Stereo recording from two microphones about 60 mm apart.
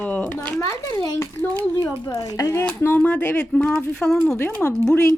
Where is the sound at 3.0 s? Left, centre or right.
Left.